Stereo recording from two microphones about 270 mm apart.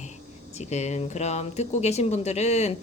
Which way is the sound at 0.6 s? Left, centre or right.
Left.